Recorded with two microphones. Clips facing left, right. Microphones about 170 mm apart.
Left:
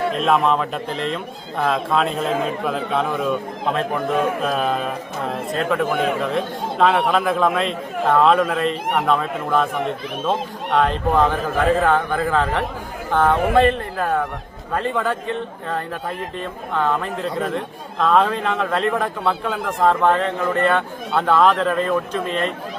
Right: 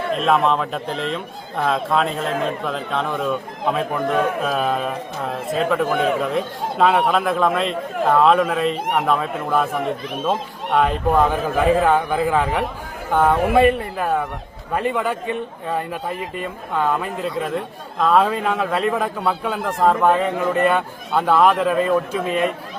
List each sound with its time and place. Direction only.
0.1 s a man's voice: centre (ahead or behind)